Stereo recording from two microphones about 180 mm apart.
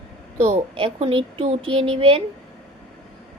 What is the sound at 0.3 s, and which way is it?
Speech, 35° right (ahead or behind).